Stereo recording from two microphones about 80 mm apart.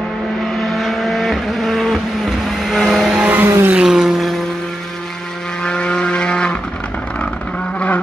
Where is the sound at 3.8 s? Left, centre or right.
Centre.